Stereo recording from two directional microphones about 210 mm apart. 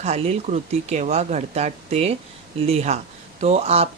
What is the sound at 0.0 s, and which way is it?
Speech, 30° right (ahead or behind).